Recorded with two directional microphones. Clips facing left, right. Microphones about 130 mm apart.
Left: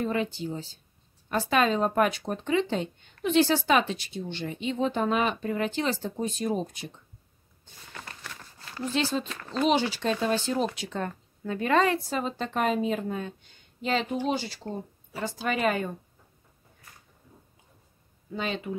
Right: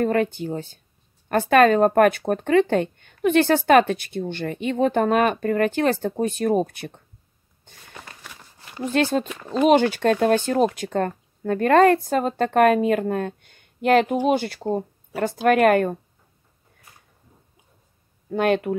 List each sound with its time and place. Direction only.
0.0 s speech: 55° right (ahead or behind)
7.9 s a sound: 15° right (ahead or behind)
8.9 s speech: 55° right (ahead or behind)
9.3 s speech: 15° right (ahead or behind)
9.6 s speech: 55° right (ahead or behind)
18.3 s speech: 60° right (ahead or behind)